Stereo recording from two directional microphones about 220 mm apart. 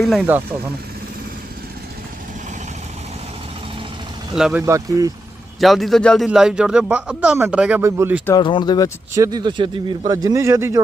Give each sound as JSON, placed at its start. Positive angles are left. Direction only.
{"t": 0.0, "sound": "a man's voice", "side_deg": 0}
{"t": 4.4, "sound": "a man's voice", "side_deg": 0}
{"t": 4.6, "sound": "a man's voice", "side_deg": -15}
{"t": 5.5, "sound": "a man's voice", "side_deg": 0}
{"t": 8.3, "sound": "speech", "side_deg": 20}
{"t": 9.1, "sound": "a man's voice", "side_deg": -15}